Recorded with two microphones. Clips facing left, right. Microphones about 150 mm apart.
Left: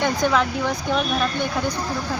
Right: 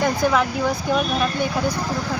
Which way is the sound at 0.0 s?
5° right (ahead or behind).